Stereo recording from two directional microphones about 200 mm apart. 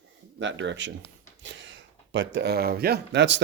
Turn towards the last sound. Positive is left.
turn(degrees=-60)  # may be behind; listen again after turning